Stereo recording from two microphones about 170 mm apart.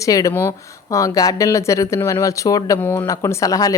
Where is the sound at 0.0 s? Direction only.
20° left (ahead or behind).